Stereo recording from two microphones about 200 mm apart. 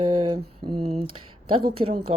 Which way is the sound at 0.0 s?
25° right (ahead or behind).